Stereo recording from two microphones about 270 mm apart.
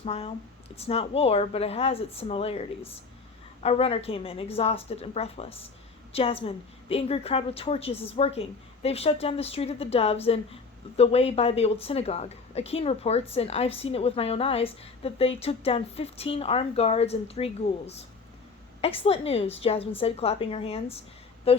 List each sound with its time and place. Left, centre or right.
0.0 s a woman's voice: left